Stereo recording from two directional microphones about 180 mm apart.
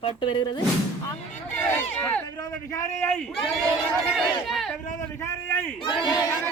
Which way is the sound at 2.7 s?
15° left (ahead or behind).